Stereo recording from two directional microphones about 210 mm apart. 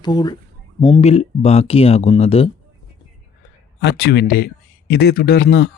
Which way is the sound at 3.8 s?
50° left (ahead or behind).